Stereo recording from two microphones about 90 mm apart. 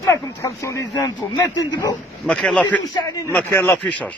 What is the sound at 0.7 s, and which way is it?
Speech, 35° left (ahead or behind).